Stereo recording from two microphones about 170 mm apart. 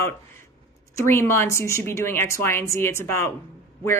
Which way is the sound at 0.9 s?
15° left (ahead or behind).